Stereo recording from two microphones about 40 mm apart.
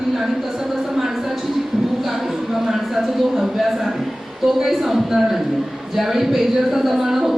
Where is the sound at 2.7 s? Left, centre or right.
Centre.